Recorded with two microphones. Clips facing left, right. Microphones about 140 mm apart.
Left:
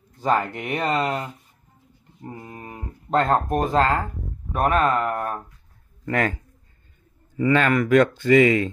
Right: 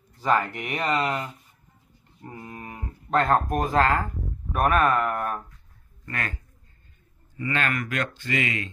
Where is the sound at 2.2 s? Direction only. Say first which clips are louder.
Left 2 dB; 25° left (ahead or behind).